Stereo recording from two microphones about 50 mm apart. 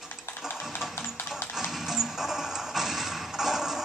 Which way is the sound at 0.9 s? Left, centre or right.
Left.